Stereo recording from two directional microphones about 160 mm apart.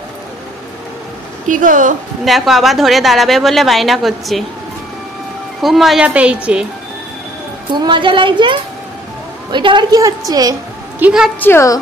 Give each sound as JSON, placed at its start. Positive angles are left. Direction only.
{"t": 1.5, "sound": "speech", "side_deg": -55}
{"t": 2.2, "sound": "a woman's voice", "side_deg": 0}
{"t": 5.6, "sound": "a woman's voice", "side_deg": 0}
{"t": 7.7, "sound": "a woman's voice", "side_deg": -30}
{"t": 11.0, "sound": "a woman's voice", "side_deg": -5}
{"t": 11.3, "sound": "a woman's voice", "side_deg": 15}